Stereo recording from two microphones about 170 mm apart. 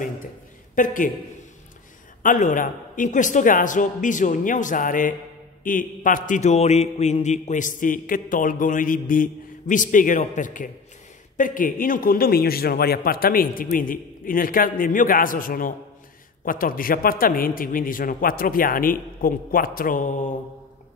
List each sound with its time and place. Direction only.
0.7 s a man's voice: 50° left (ahead or behind)
2.2 s a man's voice: 50° left (ahead or behind)